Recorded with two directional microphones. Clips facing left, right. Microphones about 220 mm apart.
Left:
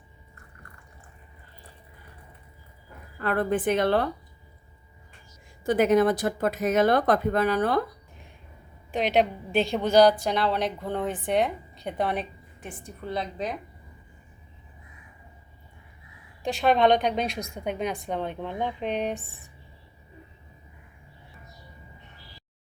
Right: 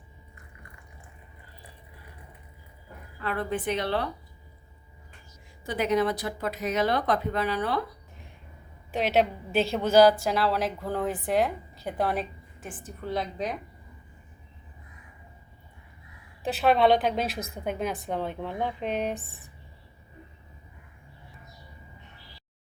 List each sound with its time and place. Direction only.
3.2 s speech: 50° left (ahead or behind)
5.6 s speech: 50° left (ahead or behind)
8.9 s a woman's voice: centre (ahead or behind)
16.4 s a woman's voice: 5° right (ahead or behind)